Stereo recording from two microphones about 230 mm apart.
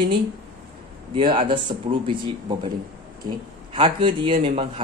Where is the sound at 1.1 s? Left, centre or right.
Right.